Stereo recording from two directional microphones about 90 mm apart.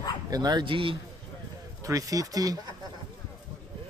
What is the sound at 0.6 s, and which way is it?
Speech, 75° right (ahead or behind).